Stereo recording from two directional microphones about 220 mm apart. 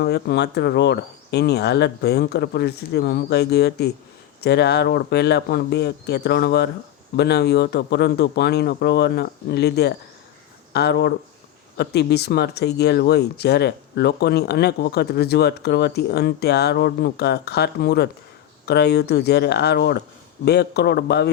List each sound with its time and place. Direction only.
0.0 s speech: 50° left (ahead or behind)